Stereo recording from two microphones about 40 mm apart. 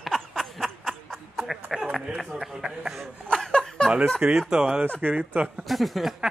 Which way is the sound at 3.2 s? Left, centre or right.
Centre.